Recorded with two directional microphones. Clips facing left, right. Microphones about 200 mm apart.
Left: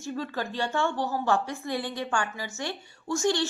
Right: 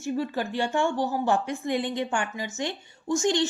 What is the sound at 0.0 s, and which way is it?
A woman's voice, 15° right (ahead or behind).